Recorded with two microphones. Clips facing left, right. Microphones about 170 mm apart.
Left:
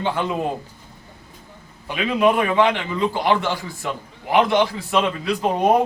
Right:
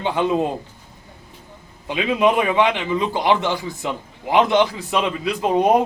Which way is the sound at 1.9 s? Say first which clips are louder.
Even; 20° right (ahead or behind).